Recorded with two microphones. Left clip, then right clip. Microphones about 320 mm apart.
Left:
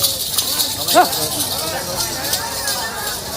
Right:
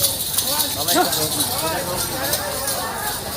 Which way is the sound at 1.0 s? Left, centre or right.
Centre.